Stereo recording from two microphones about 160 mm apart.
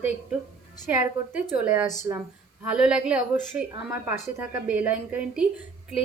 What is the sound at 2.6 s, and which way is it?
A woman's voice, 5° right (ahead or behind).